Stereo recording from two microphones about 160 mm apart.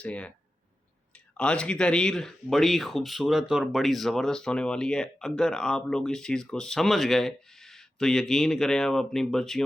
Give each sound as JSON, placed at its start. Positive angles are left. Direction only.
{"t": 0.0, "sound": "speech", "side_deg": 10}
{"t": 1.4, "sound": "speech", "side_deg": 5}